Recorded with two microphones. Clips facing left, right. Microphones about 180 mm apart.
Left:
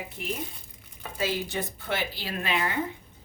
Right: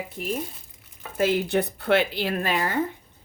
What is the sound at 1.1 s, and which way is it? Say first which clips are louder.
Speech: right 8 dB; 55° right (ahead or behind).